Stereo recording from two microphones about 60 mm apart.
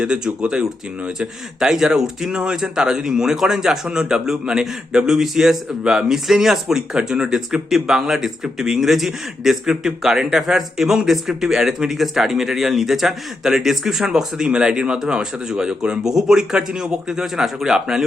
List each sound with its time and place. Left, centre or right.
0.0 s speech: centre